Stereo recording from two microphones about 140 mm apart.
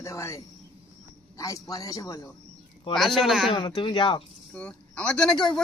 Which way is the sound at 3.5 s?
30° left (ahead or behind).